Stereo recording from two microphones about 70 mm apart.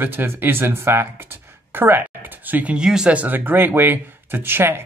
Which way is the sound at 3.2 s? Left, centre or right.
Right.